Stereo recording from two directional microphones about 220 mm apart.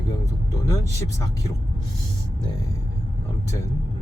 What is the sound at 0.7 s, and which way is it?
Speech, 15° left (ahead or behind).